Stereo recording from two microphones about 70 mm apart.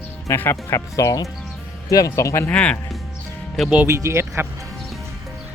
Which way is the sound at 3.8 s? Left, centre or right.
Right.